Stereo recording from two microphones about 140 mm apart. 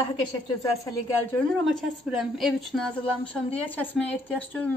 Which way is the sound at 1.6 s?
Centre (ahead or behind).